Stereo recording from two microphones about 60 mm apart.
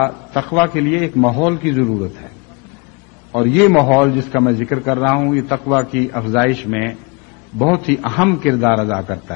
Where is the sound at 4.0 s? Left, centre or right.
Centre.